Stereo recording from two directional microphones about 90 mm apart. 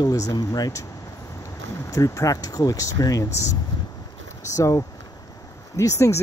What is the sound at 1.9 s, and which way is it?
Speech, 40° left (ahead or behind).